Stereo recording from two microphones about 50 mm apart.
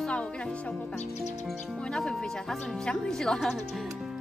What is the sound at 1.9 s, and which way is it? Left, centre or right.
Speech, centre.